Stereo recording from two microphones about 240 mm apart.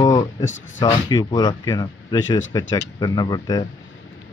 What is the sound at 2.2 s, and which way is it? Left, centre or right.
Speech, left.